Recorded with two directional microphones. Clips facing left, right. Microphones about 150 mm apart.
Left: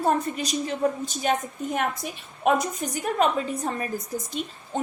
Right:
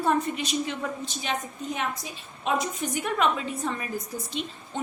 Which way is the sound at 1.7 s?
55° left (ahead or behind).